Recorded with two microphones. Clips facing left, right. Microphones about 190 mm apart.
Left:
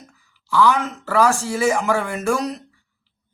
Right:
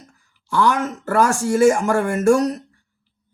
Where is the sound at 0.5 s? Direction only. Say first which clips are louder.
Left 1 dB; 50° right (ahead or behind).